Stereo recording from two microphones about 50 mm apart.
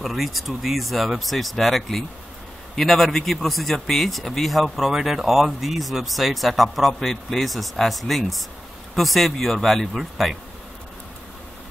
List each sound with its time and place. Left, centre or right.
0.0 s speech: centre